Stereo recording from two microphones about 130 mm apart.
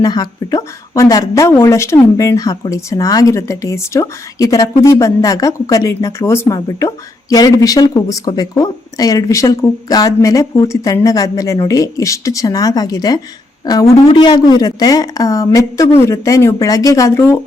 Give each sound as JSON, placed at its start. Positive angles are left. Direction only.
{"t": 0.0, "sound": "a woman's voice", "side_deg": 30}